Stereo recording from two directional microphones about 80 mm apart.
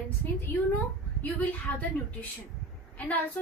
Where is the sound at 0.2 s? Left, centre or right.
Left.